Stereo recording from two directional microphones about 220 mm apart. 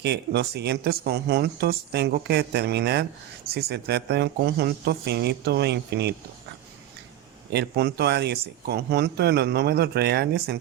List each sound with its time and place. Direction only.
0.0 s speech: 50° right (ahead or behind)
7.5 s speech: 50° right (ahead or behind)